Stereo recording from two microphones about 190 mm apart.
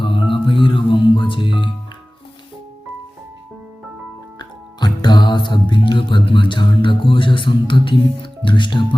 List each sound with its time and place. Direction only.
0.0 s music: 25° left (ahead or behind)
4.4 s music: 20° left (ahead or behind)